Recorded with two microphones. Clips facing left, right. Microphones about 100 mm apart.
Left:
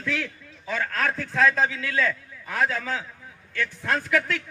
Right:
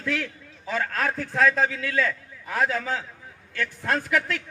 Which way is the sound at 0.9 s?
35° right (ahead or behind).